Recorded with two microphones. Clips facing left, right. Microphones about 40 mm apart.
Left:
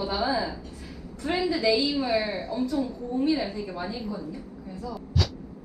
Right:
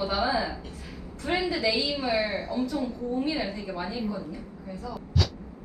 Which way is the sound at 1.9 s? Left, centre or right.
Centre.